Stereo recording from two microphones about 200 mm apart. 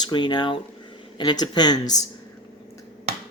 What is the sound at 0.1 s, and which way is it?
Speech, 20° left (ahead or behind).